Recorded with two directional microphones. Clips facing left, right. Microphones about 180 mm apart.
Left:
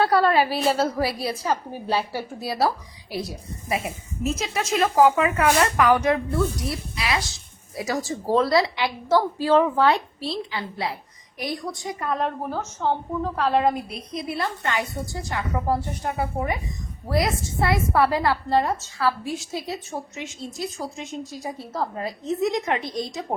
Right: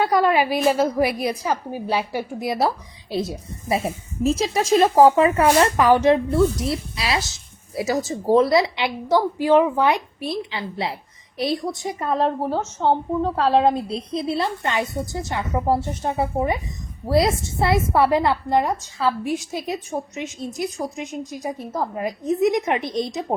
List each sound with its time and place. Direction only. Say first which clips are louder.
0.0 s a woman's voice: right 1 dB; 15° right (ahead or behind)
3.8 s a woman's voice: right 5 dB; 35° right (ahead or behind)